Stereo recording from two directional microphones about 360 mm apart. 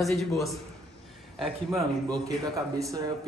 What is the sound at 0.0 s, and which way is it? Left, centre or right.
Speech, centre.